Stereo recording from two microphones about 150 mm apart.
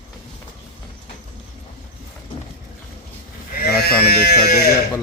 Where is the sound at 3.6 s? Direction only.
90° left.